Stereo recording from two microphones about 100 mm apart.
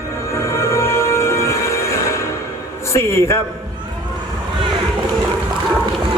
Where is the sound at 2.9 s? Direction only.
25° left (ahead or behind).